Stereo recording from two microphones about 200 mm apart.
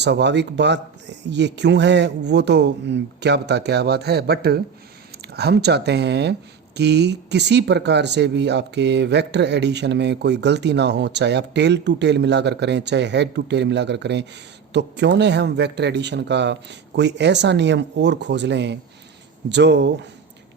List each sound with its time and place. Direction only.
0.0 s speech: 60° right (ahead or behind)